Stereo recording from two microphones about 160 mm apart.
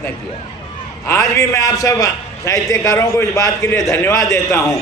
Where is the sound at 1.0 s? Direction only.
20° left (ahead or behind).